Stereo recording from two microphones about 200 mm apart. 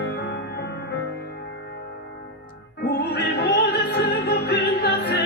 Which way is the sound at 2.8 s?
55° left (ahead or behind).